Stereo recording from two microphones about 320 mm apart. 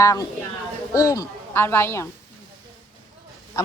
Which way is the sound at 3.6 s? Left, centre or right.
Centre.